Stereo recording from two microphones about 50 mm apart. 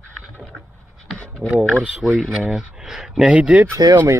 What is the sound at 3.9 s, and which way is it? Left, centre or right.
Speech, right.